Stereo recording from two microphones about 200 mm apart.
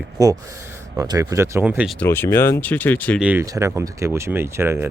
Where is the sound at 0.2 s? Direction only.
15° right (ahead or behind).